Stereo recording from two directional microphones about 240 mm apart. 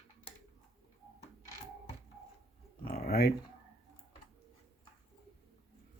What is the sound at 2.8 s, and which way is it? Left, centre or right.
Speech, left.